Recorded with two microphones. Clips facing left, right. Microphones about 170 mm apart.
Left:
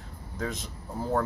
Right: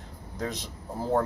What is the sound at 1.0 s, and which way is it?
Speech, 25° right (ahead or behind).